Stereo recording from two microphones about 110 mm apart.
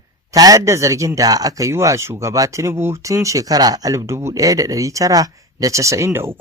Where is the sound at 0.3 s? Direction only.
30° right (ahead or behind).